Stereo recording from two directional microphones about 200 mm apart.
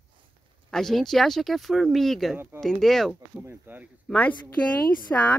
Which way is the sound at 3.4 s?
10° right (ahead or behind).